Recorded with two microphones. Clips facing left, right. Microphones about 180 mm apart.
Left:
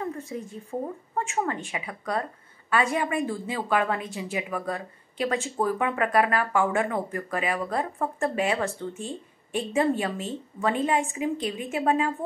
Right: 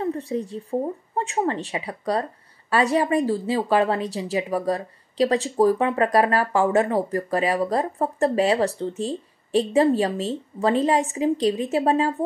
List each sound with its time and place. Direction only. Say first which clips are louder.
0.0 s a woman's voice: right 7 dB; 35° right (ahead or behind)